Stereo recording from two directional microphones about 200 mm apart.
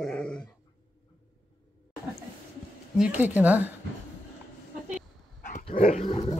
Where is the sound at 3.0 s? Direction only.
10° right (ahead or behind).